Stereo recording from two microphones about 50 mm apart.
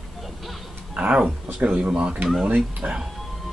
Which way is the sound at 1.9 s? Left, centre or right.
Centre.